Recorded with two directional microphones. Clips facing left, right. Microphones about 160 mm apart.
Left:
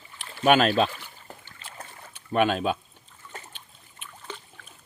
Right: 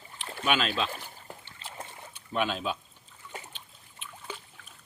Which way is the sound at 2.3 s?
55° left (ahead or behind).